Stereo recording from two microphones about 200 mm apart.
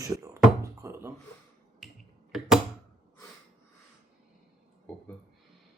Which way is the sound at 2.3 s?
Centre (ahead or behind).